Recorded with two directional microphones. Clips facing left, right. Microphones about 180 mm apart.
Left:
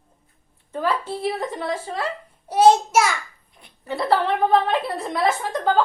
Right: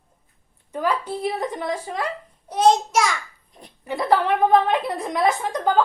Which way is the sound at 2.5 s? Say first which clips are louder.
Left 3 dB; 5° left (ahead or behind).